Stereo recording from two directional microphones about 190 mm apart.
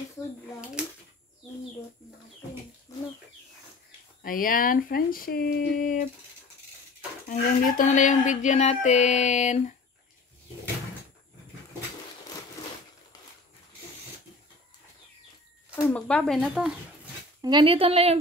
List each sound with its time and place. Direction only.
0.8 s a sound: 5° right (ahead or behind)
2.9 s bird: 15° left (ahead or behind)
4.2 s speech: 45° left (ahead or behind)
7.2 s speech: 40° left (ahead or behind)
15.7 s speech: 5° left (ahead or behind)
17.4 s speech: 25° right (ahead or behind)